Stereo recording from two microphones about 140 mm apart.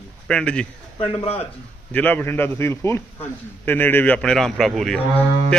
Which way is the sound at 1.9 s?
10° left (ahead or behind).